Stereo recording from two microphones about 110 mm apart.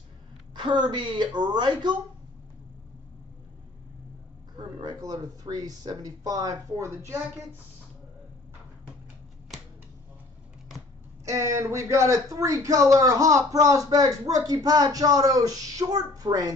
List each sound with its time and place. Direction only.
0.6 s a woman's voice: 45° right (ahead or behind)
4.6 s speech: 45° right (ahead or behind); by 7.2 s 25° right (ahead or behind)
11.2 s speech: 30° right (ahead or behind)